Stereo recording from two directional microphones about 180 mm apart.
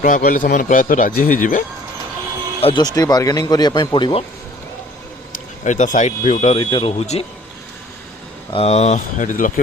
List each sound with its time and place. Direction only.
0.0 s speech: 50° left (ahead or behind)
2.6 s speech: 30° left (ahead or behind)
5.3 s speech: 45° left (ahead or behind)
8.5 s speech: 35° left (ahead or behind)